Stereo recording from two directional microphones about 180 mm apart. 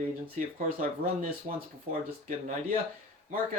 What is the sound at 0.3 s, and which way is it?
Speech, 45° right (ahead or behind).